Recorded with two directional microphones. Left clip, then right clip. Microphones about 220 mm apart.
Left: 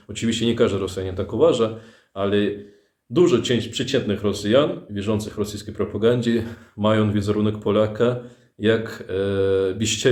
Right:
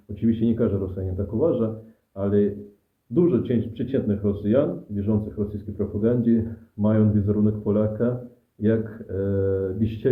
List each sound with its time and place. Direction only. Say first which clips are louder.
0.1 s speech: left 2 dB; 20° left (ahead or behind)